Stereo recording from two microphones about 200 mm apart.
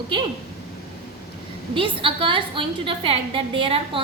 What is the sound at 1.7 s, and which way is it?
A woman's voice, 25° right (ahead or behind).